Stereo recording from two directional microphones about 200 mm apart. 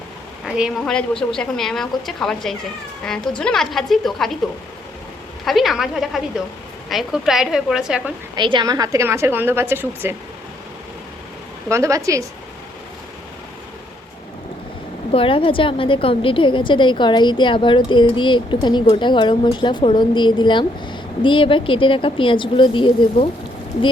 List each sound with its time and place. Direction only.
0.4 s a woman's voice: 5° right (ahead or behind)
5.5 s a woman's voice: centre (ahead or behind)
8.4 s a woman's voice: 25° right (ahead or behind)
11.7 s a woman's voice: 15° right (ahead or behind)
15.1 s a woman's voice: 25° left (ahead or behind)